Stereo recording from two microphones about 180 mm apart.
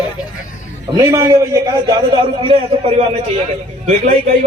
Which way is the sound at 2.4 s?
30° right (ahead or behind).